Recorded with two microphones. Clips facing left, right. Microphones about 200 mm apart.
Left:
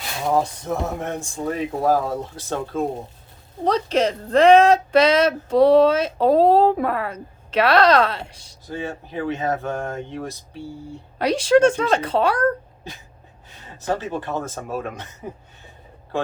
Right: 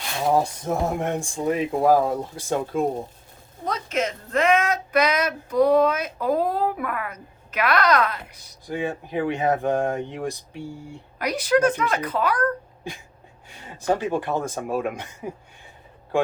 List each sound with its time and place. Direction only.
0.9 s speech: 15° right (ahead or behind)
3.6 s a woman's voice: 35° left (ahead or behind)
8.6 s speech: 15° right (ahead or behind)
11.2 s a woman's voice: 30° left (ahead or behind)
13.5 s speech: 10° right (ahead or behind)